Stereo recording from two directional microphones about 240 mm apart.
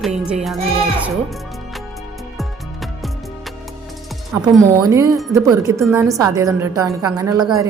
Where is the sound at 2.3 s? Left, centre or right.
Centre.